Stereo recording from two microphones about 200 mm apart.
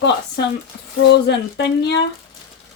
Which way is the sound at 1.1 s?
60° left (ahead or behind).